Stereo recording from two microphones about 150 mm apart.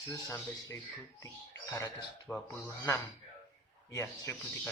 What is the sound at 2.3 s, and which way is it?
Speech, 10° left (ahead or behind).